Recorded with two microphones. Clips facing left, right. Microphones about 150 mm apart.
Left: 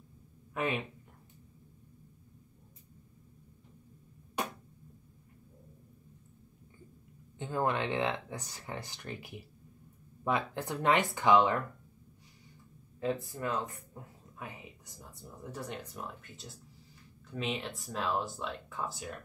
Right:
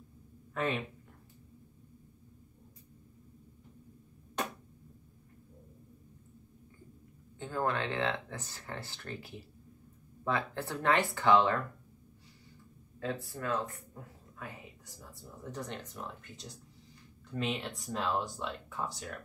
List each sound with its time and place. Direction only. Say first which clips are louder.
0.6 s speech: even; 15° left (ahead or behind)
7.3 s speech: left 1 dB; 20° left (ahead or behind)
13.0 s speech: left 3 dB; 20° left (ahead or behind)
15.5 s speech: even; 5° left (ahead or behind)